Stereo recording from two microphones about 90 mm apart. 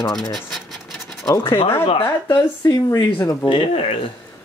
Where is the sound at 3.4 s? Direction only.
75° left (ahead or behind).